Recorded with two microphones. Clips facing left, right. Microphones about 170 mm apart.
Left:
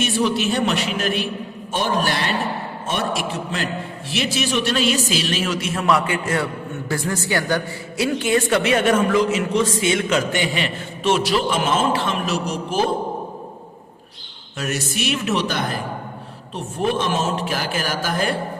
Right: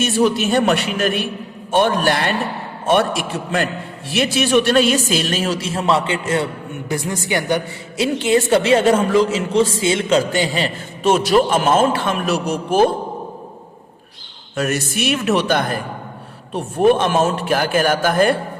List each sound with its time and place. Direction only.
0.0 s a man's voice: 50° right (ahead or behind)
14.5 s a man's voice: 55° right (ahead or behind)